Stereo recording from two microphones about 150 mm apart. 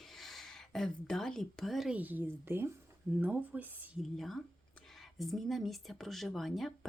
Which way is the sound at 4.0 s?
Centre (ahead or behind).